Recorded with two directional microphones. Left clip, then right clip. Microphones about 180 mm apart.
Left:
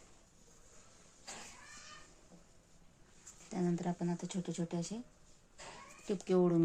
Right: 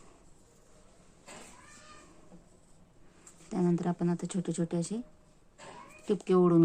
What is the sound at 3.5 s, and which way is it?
Speech, 15° right (ahead or behind).